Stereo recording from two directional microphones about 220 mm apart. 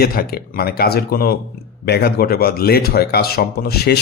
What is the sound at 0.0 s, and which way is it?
Speech, 45° left (ahead or behind).